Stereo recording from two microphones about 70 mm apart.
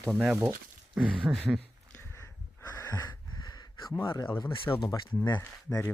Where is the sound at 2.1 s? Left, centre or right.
Left.